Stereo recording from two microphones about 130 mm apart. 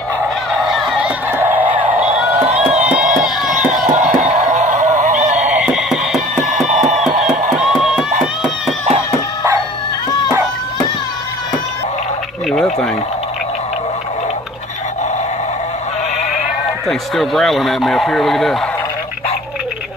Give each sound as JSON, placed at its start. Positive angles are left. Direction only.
{"t": 0.6, "sound": "honk", "side_deg": 0}
{"t": 1.3, "sound": "honk", "side_deg": -15}
{"t": 2.7, "sound": "crowd", "side_deg": -5}
{"t": 4.2, "sound": "fowl", "side_deg": -70}
{"t": 5.5, "sound": "music", "side_deg": -5}
{"t": 7.6, "sound": "crowd", "side_deg": -5}
{"t": 12.4, "sound": "a sound", "side_deg": 5}
{"t": 17.1, "sound": "speech", "side_deg": 0}